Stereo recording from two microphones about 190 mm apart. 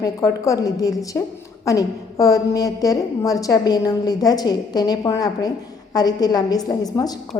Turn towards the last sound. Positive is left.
turn(degrees=20)  # may be behind; listen again after turning